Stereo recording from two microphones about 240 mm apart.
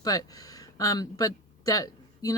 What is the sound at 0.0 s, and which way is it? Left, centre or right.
Speech, centre.